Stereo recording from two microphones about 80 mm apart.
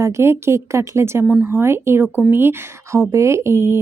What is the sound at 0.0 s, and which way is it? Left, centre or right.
Speech, right.